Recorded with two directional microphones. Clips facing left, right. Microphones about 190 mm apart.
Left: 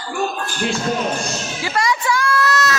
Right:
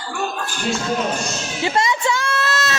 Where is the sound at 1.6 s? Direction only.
25° right (ahead or behind).